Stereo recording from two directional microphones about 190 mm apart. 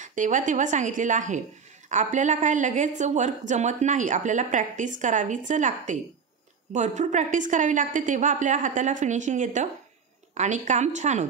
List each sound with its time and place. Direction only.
0.0 s a woman's voice: 40° right (ahead or behind)